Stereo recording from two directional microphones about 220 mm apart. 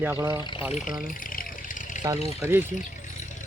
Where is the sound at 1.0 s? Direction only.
40° left (ahead or behind).